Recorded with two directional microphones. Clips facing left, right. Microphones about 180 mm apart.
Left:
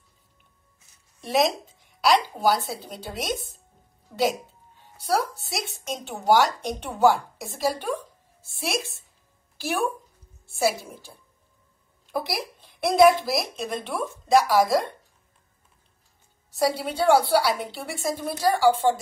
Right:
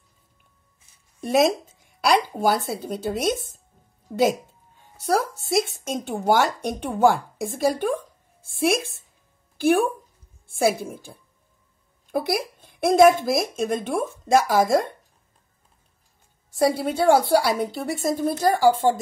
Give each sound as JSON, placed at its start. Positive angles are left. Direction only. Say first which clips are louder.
{"t": 1.2, "sound": "speech", "louder": "right 4 dB", "side_deg": -50}
{"t": 5.6, "sound": "a woman's voice", "louder": "right 8 dB", "side_deg": -50}
{"t": 16.4, "sound": "speech", "louder": "right 4 dB", "side_deg": -50}